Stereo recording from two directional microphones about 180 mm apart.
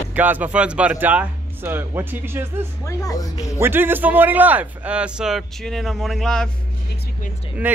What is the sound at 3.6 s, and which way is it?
A man's voice, 10° right (ahead or behind).